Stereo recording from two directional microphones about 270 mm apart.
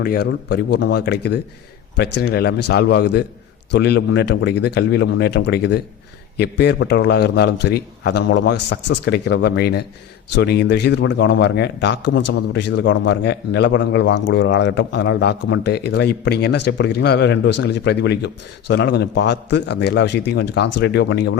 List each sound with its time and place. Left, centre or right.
0.0 s a man's voice: left